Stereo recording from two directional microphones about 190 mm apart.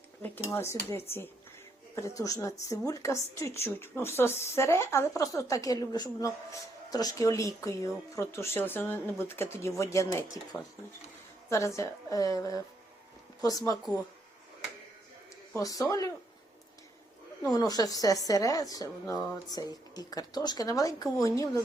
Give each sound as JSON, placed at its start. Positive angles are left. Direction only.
{"t": 0.5, "sound": "a woman's voice", "side_deg": 15}
{"t": 15.5, "sound": "a woman's voice", "side_deg": 15}
{"t": 17.5, "sound": "speech", "side_deg": 20}